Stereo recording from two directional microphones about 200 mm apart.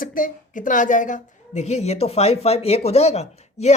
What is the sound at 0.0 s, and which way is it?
A woman's voice, 40° left (ahead or behind).